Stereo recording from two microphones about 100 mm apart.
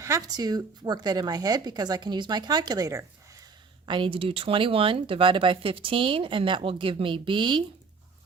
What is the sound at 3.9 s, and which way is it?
Speech, 55° right (ahead or behind).